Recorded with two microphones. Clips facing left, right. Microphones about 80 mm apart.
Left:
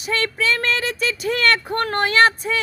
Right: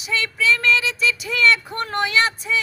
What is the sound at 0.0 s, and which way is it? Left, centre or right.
Speech, left.